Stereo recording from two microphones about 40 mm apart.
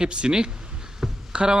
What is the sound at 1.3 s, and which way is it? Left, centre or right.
Speech, right.